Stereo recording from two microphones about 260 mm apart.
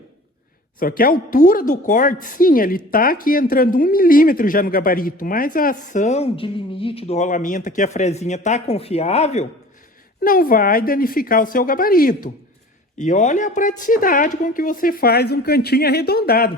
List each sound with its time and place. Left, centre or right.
0.8 s a woman's voice: left